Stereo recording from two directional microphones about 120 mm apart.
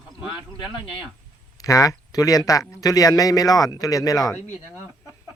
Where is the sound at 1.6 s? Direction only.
30° left (ahead or behind).